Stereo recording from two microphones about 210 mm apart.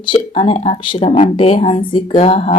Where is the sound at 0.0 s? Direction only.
25° left (ahead or behind).